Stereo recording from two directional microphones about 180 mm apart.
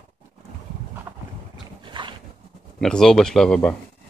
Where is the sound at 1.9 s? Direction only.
25° right (ahead or behind).